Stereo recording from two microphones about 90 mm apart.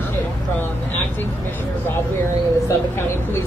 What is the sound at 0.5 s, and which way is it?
Vehicle, 20° left (ahead or behind).